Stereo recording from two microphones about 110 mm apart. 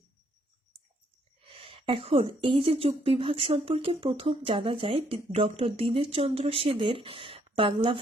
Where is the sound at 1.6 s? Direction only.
55° right (ahead or behind).